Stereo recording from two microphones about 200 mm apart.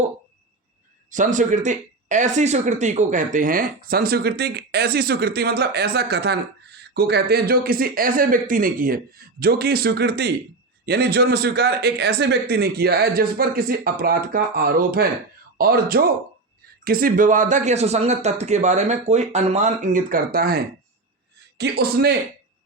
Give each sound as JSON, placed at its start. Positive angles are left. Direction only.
{"t": 1.1, "sound": "speech", "side_deg": -40}
{"t": 21.6, "sound": "speech", "side_deg": -50}